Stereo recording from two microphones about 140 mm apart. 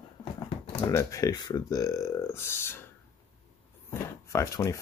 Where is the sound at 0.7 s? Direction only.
20° left (ahead or behind).